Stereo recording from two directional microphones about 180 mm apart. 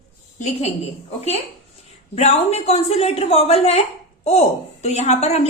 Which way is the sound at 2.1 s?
35° left (ahead or behind).